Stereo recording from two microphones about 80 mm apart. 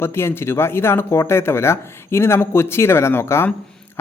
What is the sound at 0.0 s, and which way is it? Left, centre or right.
Speech, left.